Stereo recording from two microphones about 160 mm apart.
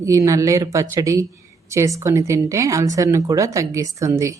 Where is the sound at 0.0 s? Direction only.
20° right (ahead or behind).